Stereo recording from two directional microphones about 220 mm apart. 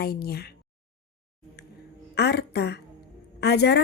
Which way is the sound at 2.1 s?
50° left (ahead or behind).